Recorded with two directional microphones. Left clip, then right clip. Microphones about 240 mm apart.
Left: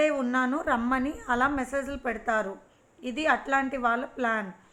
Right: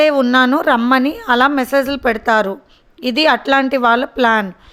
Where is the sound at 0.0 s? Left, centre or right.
Right.